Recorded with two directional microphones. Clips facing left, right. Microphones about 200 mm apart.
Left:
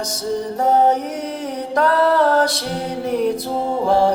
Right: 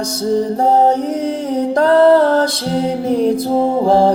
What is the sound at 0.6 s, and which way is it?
Mantra, 30° right (ahead or behind).